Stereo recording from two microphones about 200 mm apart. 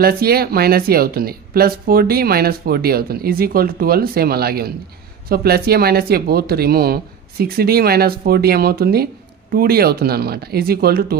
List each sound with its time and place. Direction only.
0.0 s speech: 50° right (ahead or behind)